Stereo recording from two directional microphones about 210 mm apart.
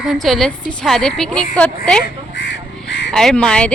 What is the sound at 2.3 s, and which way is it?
Crow, 55° left (ahead or behind).